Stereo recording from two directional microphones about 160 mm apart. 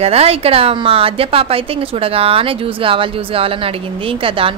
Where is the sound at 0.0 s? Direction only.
40° right (ahead or behind).